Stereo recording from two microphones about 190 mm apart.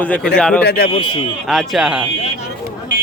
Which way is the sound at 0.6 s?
55° left (ahead or behind).